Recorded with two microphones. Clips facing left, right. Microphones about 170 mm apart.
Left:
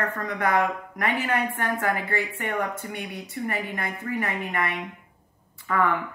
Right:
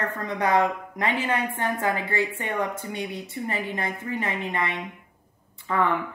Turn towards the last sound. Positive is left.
turn(degrees=-25)  # may be behind; listen again after turning